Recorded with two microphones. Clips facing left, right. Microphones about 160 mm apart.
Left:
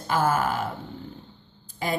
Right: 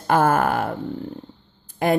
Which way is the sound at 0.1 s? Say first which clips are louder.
Right 6 dB; 55° right (ahead or behind).